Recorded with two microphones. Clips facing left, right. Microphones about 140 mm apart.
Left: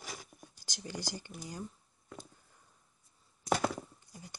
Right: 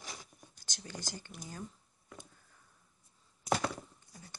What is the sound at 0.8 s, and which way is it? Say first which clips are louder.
Speech: left 4 dB; 10° left (ahead or behind).